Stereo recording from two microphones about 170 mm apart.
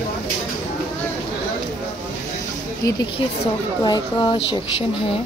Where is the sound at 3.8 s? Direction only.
25° left (ahead or behind).